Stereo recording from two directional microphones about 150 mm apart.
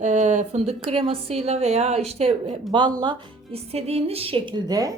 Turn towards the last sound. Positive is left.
turn(degrees=-25)  # may be behind; listen again after turning